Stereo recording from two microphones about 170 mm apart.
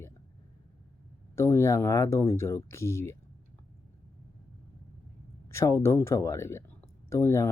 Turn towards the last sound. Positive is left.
turn(degrees=15)  # may be behind; listen again after turning